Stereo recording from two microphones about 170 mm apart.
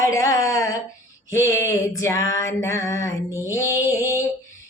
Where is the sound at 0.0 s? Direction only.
20° left (ahead or behind).